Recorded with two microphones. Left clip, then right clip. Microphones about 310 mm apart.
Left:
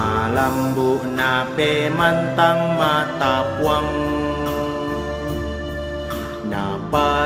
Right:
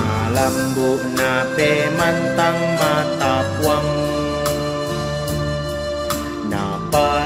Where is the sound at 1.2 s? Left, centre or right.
Centre.